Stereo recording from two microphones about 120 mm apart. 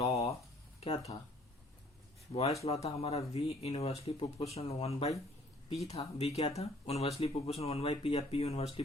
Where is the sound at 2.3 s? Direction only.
60° left (ahead or behind).